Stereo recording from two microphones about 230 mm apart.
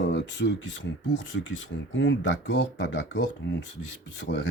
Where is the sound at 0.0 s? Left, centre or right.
Left.